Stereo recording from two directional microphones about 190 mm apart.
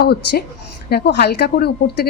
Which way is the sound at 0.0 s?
55° left (ahead or behind).